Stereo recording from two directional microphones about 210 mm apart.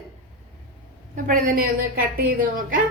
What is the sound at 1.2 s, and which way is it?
Speech, 40° right (ahead or behind).